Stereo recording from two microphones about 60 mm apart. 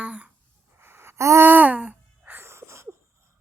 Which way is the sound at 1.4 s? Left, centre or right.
Right.